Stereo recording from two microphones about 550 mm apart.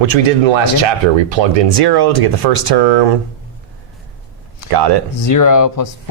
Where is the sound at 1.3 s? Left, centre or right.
Right.